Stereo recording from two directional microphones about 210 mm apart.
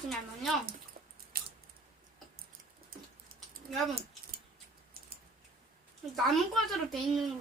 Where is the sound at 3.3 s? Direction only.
45° right (ahead or behind).